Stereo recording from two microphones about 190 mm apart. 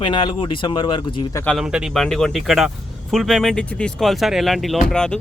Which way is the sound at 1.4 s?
5° left (ahead or behind).